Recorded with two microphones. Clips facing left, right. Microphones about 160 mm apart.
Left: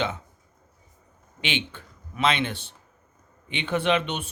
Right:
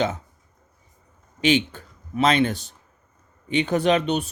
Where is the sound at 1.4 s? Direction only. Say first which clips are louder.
Right 10 dB; 40° right (ahead or behind).